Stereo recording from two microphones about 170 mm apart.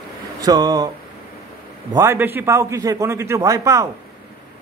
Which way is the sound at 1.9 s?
15° right (ahead or behind).